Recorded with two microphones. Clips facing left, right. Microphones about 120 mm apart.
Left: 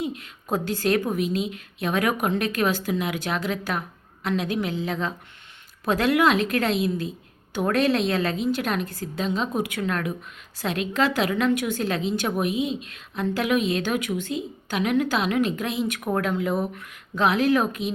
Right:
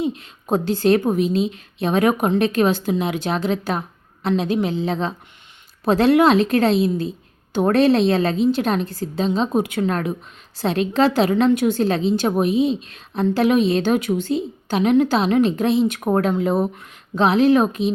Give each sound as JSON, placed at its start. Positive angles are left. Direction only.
{"t": 0.0, "sound": "a woman's voice", "side_deg": -25}